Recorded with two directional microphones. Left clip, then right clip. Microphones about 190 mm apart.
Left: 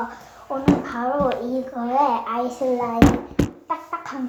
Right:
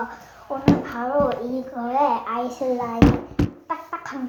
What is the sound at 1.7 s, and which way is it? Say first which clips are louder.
Speech: left 1 dB; 15° left (ahead or behind).